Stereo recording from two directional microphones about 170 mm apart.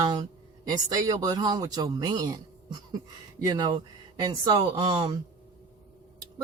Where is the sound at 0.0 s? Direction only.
25° right (ahead or behind).